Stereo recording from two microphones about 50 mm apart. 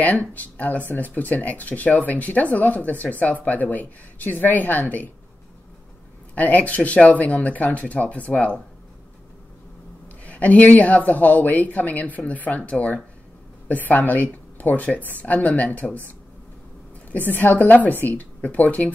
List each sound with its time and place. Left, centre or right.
0.0 s speech: left
6.3 s speech: left
10.2 s speech: left
17.3 s speech: left